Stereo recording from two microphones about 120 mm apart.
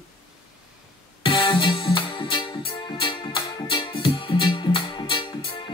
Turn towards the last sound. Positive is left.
turn(degrees=45)  # may be behind; listen again after turning